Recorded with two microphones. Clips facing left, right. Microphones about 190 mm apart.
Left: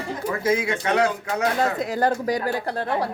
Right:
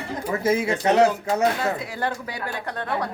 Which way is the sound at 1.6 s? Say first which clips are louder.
Left 4 dB; 40° left (ahead or behind).